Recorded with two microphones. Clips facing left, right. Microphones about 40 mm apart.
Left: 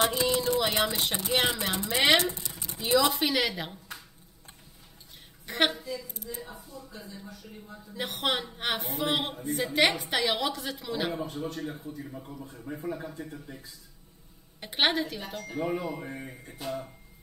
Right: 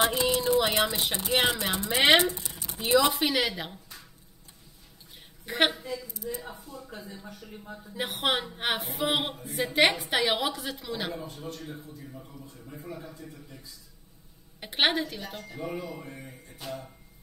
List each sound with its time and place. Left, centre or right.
0.0 s a sound: centre
0.9 s speech: centre
5.4 s a woman's voice: centre
6.4 s speech: right
7.9 s a woman's voice: centre
11.1 s speech: left
11.8 s a man's voice: left
14.6 s a woman's voice: centre
15.4 s speech: left
15.7 s a man's voice: left